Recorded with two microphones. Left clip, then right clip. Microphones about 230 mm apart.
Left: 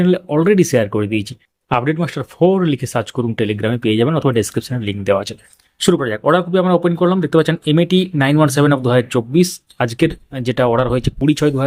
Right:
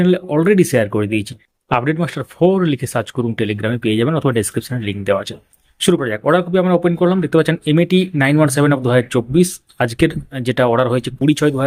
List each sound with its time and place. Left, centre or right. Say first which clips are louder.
0.0 s speech: even; centre